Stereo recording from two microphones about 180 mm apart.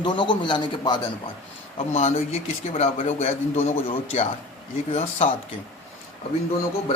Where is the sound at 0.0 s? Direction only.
25° left (ahead or behind).